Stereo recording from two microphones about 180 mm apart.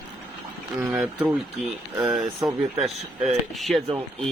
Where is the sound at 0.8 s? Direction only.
10° right (ahead or behind).